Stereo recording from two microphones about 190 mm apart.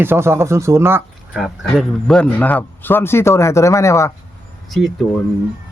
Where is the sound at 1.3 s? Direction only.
Centre (ahead or behind).